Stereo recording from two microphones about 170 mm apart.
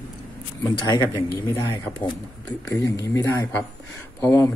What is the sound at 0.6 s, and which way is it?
Speech, 25° left (ahead or behind).